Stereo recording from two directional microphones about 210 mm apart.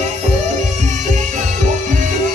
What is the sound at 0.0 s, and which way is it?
Music, 35° right (ahead or behind).